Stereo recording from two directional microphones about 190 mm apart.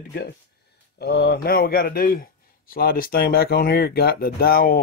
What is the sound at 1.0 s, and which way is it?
Speech, 60° left (ahead or behind).